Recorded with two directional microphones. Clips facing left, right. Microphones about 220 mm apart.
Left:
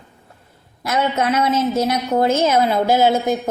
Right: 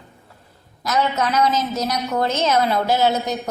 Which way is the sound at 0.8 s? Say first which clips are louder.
Left 2 dB; 25° left (ahead or behind).